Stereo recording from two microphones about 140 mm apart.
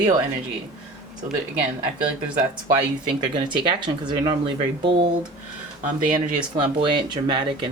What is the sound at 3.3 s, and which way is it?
Speech, 35° right (ahead or behind).